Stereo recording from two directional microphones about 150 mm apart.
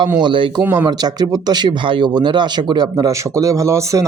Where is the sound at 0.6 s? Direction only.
15° right (ahead or behind).